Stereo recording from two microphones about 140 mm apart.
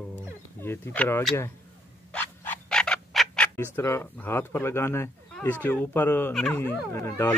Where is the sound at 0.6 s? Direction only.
15° left (ahead or behind).